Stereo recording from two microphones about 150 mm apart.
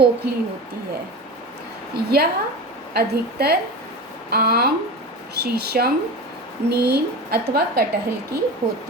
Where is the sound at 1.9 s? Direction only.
90° right.